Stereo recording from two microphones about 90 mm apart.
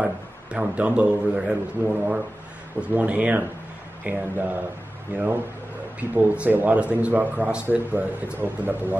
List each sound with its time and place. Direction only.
0.0 s a man's voice: 15° right (ahead or behind)